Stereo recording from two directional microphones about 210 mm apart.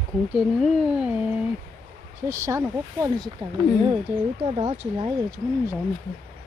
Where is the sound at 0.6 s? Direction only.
5° right (ahead or behind).